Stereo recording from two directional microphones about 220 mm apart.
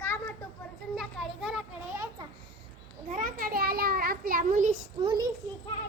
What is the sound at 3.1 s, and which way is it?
A child's voice, 40° right (ahead or behind).